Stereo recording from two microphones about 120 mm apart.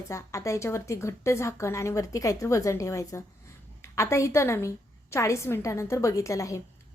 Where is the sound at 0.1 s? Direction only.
25° left (ahead or behind).